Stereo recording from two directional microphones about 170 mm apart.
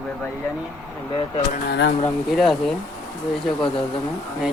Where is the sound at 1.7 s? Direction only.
80° left.